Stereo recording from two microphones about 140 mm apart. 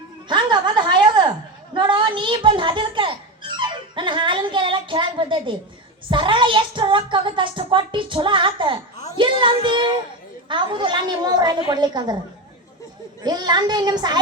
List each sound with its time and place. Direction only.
0.3 s a sound: 35° right (ahead or behind)
1.7 s music: 35° right (ahead or behind)
6.1 s a child's voice: 35° right (ahead or behind)
13.2 s a child's voice: 30° right (ahead or behind)